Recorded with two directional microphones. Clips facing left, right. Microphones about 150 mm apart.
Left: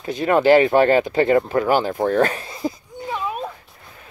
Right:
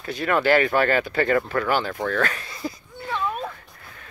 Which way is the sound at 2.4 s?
20° left (ahead or behind).